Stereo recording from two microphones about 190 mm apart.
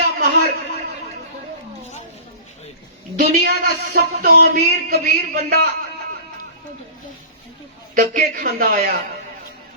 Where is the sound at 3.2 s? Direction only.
60° right (ahead or behind).